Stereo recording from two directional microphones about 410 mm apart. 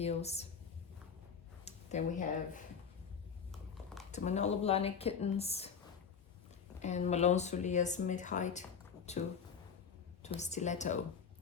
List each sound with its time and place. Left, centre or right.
0.0 s speech: centre
1.6 s speech: centre
3.5 s a sound: centre
4.1 s speech: centre
6.7 s speech: centre
10.2 s speech: centre